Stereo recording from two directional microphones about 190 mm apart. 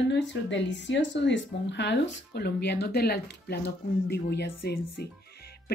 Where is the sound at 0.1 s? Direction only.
70° left (ahead or behind).